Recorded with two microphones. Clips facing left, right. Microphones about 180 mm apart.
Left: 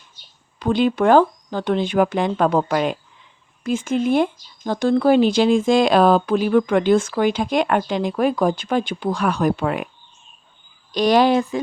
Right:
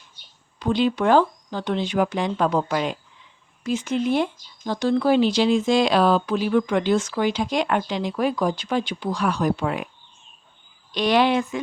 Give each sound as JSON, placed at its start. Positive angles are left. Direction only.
{"t": 0.6, "sound": "speech", "side_deg": 50}
{"t": 10.9, "sound": "a woman's voice", "side_deg": 40}